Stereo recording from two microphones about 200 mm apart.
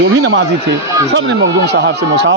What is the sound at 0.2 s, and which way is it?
Speech, 65° right (ahead or behind).